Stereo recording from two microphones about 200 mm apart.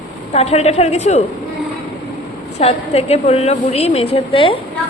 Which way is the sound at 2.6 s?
30° left (ahead or behind).